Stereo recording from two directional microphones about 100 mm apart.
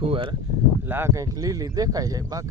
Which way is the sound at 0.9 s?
25° right (ahead or behind).